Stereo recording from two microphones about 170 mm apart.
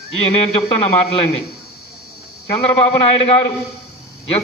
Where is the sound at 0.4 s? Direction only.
35° left (ahead or behind).